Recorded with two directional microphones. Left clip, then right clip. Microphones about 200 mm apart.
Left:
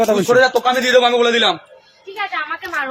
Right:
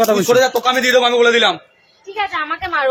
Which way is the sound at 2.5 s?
55° right (ahead or behind).